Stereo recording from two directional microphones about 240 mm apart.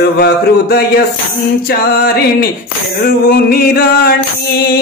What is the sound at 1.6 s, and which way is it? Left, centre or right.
Mantra, left.